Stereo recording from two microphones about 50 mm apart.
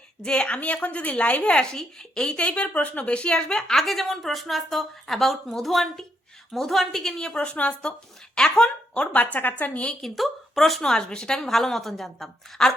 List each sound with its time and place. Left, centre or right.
0.2 s a woman's voice: centre
2.4 s a woman's voice: left
3.4 s a woman's voice: centre
9.1 s a woman's voice: left
10.0 s a woman's voice: centre
11.4 s a woman's voice: centre